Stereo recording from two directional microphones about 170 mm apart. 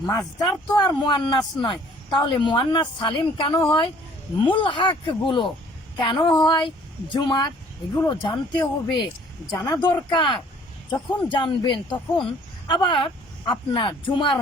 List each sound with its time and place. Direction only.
0.0 s speech: 20° left (ahead or behind)